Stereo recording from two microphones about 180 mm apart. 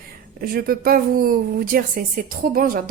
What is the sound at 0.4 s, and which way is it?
A woman's voice, 55° right (ahead or behind).